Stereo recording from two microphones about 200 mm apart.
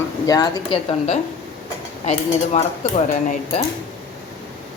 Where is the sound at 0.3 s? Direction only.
20° left (ahead or behind).